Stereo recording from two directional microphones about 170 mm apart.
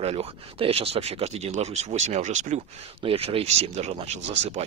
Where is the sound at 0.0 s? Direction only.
35° right (ahead or behind).